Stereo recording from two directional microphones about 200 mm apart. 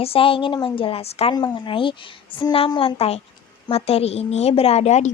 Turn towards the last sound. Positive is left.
turn(degrees=35)  # may be behind; listen again after turning